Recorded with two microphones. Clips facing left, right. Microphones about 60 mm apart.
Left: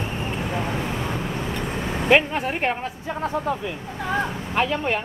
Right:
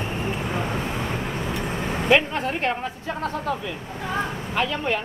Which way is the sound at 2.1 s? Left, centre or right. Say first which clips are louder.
Left 1 dB; left.